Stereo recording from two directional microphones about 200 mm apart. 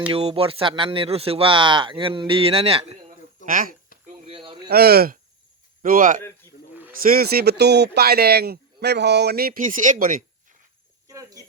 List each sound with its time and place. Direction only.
0.1 s speech: 30° right (ahead or behind)
3.4 s speech: 45° right (ahead or behind)
4.3 s a sound: 25° right (ahead or behind)
4.7 s speech: 50° right (ahead or behind)
11.1 s cricket: 15° right (ahead or behind)